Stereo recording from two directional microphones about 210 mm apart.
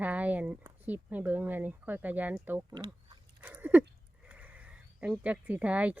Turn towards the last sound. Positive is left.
turn(degrees=-5)  # may be behind; listen again after turning